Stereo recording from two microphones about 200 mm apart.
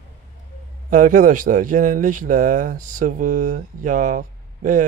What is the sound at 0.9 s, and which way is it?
Speech, 40° right (ahead or behind).